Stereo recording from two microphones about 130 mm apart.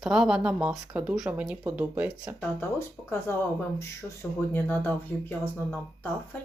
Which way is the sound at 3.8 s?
20° left (ahead or behind).